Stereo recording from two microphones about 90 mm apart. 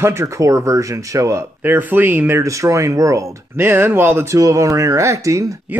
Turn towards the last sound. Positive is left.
turn(degrees=-35)  # may be behind; listen again after turning